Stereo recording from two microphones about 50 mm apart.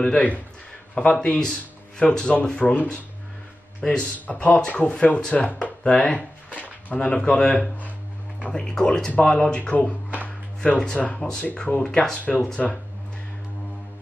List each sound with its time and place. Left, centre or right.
0.9 s speech: centre
3.8 s speech: left
5.9 s a sound: centre
7.0 s speech: centre
9.6 s speech: left
11.1 s speech: centre